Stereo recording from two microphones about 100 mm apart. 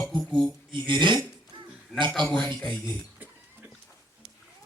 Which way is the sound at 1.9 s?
Centre (ahead or behind).